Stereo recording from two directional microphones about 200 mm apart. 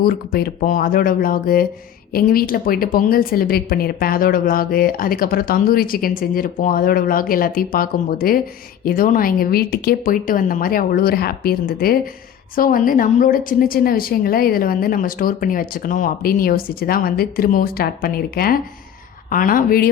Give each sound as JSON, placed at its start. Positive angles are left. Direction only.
{"t": 0.0, "sound": "a woman's voice", "side_deg": 50}